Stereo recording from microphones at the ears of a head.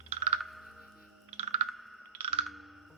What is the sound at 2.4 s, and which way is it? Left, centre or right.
Music, centre.